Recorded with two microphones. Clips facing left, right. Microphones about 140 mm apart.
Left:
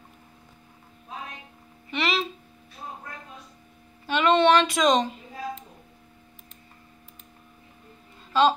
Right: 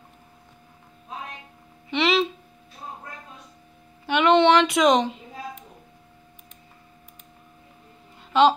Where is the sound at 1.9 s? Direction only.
85° right.